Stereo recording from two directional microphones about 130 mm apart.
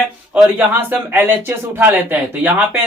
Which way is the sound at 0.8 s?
15° right (ahead or behind).